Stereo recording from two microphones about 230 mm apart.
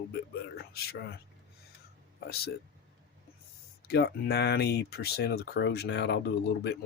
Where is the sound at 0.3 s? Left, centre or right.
Left.